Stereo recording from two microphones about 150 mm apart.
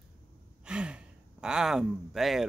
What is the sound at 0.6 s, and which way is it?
Speech, 5° right (ahead or behind).